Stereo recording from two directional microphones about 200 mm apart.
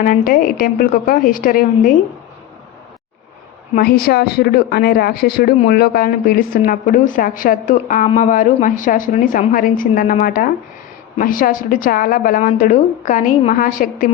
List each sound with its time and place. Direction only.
0.0 s speech: 45° left (ahead or behind)
3.8 s speech: 50° left (ahead or behind)